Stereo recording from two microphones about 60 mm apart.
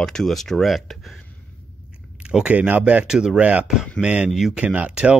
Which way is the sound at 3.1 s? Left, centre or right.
Centre.